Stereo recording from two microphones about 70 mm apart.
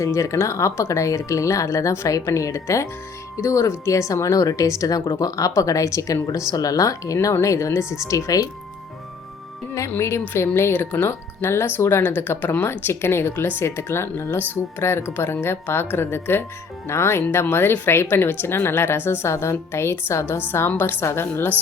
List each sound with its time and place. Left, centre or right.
0.0 s speech: left
8.0 s speech: left
10.0 s speech: left